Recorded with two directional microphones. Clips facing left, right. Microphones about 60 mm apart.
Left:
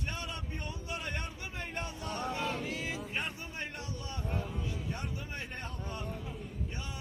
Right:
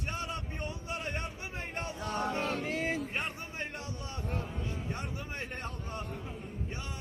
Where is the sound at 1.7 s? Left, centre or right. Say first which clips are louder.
Right 4 dB; right.